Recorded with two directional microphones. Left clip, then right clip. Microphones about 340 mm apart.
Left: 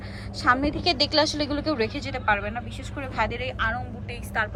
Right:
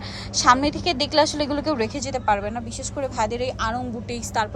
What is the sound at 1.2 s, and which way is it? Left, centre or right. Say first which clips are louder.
Speech: right 3 dB; right.